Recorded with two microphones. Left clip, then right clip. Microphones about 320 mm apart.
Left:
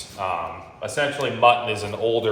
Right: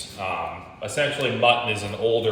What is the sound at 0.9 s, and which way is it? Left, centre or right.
A man's voice, centre.